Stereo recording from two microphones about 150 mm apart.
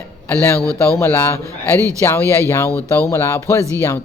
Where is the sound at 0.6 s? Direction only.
20° right (ahead or behind).